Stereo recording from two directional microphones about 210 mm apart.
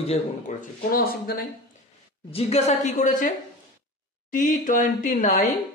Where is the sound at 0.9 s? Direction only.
45° left (ahead or behind).